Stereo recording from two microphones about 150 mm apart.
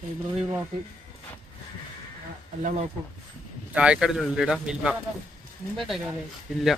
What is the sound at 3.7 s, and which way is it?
Speech, 5° right (ahead or behind).